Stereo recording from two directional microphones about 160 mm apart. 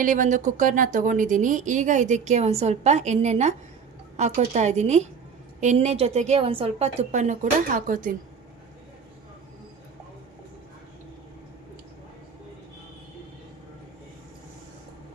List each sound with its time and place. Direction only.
0.0 s a woman's voice: 50° right (ahead or behind)